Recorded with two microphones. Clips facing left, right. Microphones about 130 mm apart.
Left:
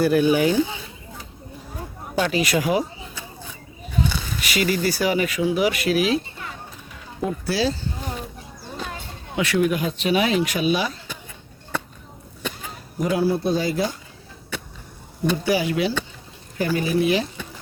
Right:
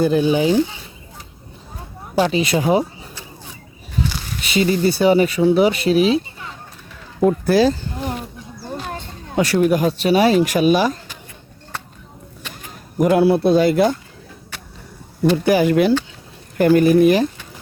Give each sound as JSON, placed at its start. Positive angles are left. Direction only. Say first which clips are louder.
{"t": 0.0, "sound": "speech", "louder": "right 2 dB", "side_deg": -25}
{"t": 2.1, "sound": "speech", "louder": "right 4 dB", "side_deg": -25}
{"t": 4.4, "sound": "speech", "louder": "right 5 dB", "side_deg": -25}
{"t": 7.3, "sound": "speech", "louder": "right 9 dB", "side_deg": -50}
{"t": 9.3, "sound": "speech", "louder": "right 5 dB", "side_deg": -40}
{"t": 13.0, "sound": "speech", "louder": "right 7 dB", "side_deg": -60}
{"t": 15.4, "sound": "speech", "louder": "right 8 dB", "side_deg": -50}